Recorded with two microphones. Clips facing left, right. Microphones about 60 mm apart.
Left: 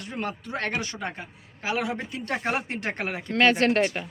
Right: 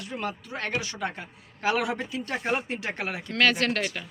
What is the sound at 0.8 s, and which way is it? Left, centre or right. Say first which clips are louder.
Speech: even; left.